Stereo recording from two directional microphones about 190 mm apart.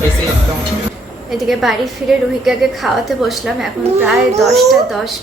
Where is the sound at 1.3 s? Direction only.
Centre (ahead or behind).